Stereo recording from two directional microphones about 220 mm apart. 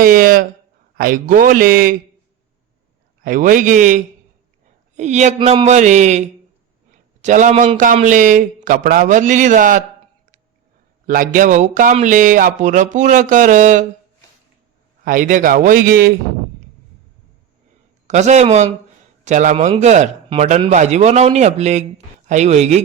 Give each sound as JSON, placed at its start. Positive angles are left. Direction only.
{"t": 0.0, "sound": "a man's voice", "side_deg": -40}
{"t": 3.2, "sound": "a man's voice", "side_deg": -35}
{"t": 11.0, "sound": "a man's voice", "side_deg": -40}
{"t": 15.0, "sound": "a man's voice", "side_deg": -40}
{"t": 18.1, "sound": "a man's voice", "side_deg": -30}